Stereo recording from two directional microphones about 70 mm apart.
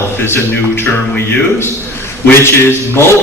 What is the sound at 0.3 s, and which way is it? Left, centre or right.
Speech, left.